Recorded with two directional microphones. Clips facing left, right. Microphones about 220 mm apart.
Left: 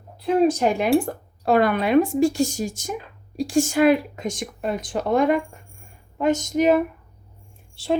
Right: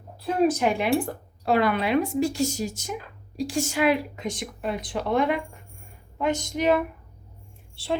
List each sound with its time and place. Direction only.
0.4 s speech: 35° left (ahead or behind)
1.5 s speech: 45° left (ahead or behind)